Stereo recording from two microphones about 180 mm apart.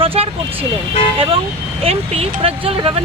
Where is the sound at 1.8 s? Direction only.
35° right (ahead or behind).